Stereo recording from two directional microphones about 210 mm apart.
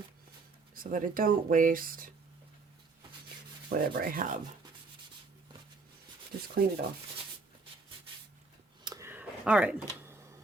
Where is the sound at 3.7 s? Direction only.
45° right (ahead or behind).